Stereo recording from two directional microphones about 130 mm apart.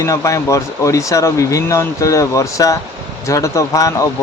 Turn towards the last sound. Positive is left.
turn(degrees=25)  # may be behind; listen again after turning